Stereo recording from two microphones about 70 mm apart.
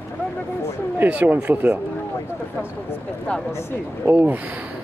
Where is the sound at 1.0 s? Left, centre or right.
Right.